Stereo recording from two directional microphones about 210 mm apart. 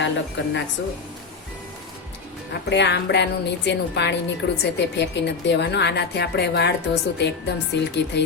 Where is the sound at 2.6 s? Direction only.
55° left (ahead or behind).